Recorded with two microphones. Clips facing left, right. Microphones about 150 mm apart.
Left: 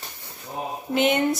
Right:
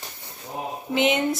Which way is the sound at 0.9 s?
20° right (ahead or behind).